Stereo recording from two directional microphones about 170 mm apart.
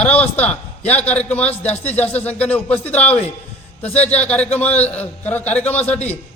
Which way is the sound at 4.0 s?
10° left (ahead or behind).